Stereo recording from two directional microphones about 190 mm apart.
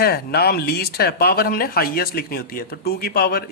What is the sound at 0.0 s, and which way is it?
Speech, 55° left (ahead or behind).